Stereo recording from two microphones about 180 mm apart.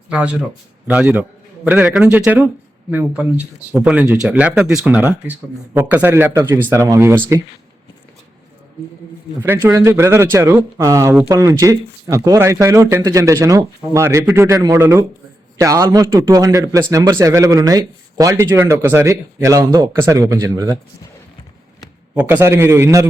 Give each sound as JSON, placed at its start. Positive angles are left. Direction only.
{"t": 0.1, "sound": "speech", "side_deg": -5}
{"t": 9.4, "sound": "a man's voice", "side_deg": -10}
{"t": 22.1, "sound": "speech", "side_deg": -10}